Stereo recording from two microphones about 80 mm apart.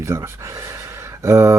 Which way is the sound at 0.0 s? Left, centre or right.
Right.